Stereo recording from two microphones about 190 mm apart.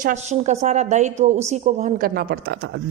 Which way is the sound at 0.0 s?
40° right (ahead or behind).